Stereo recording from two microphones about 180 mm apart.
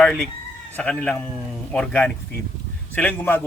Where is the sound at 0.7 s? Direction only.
5° left (ahead or behind).